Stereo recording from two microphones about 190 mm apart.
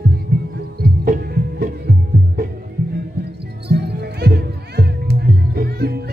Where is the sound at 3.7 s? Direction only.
55° right (ahead or behind).